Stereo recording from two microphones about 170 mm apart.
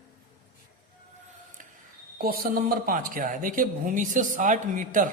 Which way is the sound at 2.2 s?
60° right (ahead or behind).